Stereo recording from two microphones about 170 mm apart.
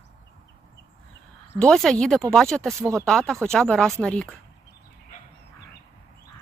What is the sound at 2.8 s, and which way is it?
Speech, 15° right (ahead or behind).